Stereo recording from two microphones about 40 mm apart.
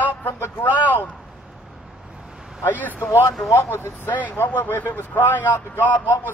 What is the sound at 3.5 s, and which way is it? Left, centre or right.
Speech, left.